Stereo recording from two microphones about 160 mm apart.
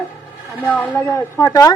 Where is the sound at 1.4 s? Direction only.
20° left (ahead or behind).